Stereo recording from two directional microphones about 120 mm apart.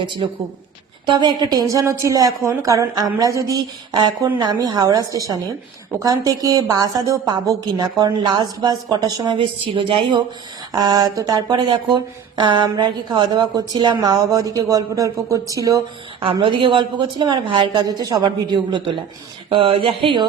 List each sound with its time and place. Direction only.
0.0 s speech: 40° right (ahead or behind)
16.2 s speech: 45° right (ahead or behind)